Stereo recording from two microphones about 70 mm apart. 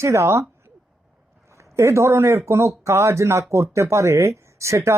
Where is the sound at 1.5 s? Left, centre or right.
Right.